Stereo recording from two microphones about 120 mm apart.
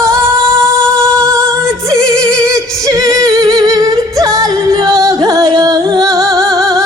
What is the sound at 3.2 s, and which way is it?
Humming, 30° right (ahead or behind).